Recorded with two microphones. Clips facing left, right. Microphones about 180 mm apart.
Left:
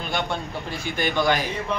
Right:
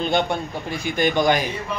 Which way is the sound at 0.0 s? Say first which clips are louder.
Right 6 dB; 20° right (ahead or behind).